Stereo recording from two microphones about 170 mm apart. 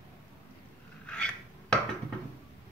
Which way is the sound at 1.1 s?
5° left (ahead or behind).